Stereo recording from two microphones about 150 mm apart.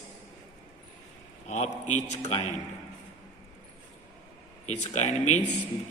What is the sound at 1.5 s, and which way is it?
Speech, 50° left (ahead or behind).